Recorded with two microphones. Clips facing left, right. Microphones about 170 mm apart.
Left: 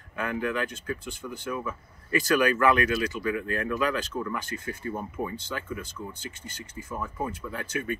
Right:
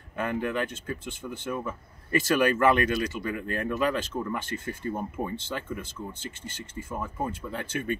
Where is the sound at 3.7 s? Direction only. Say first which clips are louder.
Right 2 dB; 25° right (ahead or behind).